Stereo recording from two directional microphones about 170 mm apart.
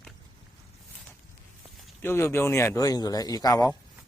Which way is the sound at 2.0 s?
15° left (ahead or behind).